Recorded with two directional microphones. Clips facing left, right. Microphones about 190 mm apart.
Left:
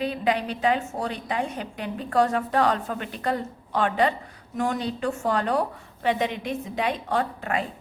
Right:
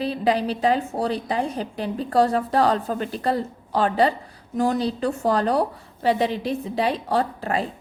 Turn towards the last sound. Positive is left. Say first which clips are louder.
# right 3 dB
turn(degrees=-35)  # may be behind; listen again after turning